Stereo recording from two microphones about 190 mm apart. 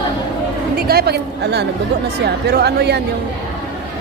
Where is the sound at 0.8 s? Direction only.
55° right (ahead or behind).